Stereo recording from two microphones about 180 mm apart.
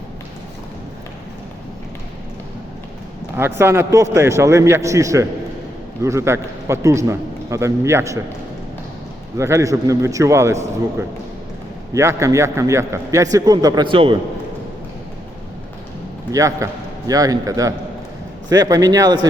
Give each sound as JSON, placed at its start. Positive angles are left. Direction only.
{"t": 3.6, "sound": "a man's voice", "side_deg": -15}
{"t": 9.4, "sound": "a man's voice", "side_deg": -15}
{"t": 11.9, "sound": "a man's voice", "side_deg": -15}
{"t": 16.3, "sound": "a man's voice", "side_deg": -15}